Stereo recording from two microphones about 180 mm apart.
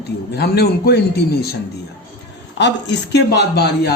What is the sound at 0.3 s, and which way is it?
A man's voice, 65° left (ahead or behind).